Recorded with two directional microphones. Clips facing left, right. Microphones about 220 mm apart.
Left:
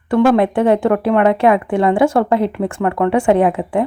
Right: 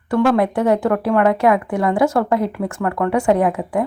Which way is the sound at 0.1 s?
25° left (ahead or behind).